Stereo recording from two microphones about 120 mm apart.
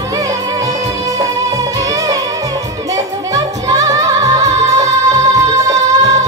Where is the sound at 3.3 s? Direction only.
30° right (ahead or behind).